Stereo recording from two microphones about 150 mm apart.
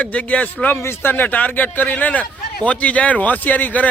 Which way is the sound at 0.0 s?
10° left (ahead or behind).